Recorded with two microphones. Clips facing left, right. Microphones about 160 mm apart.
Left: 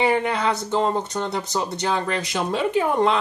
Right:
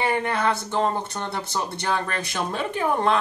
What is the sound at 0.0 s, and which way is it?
Speech, 15° left (ahead or behind).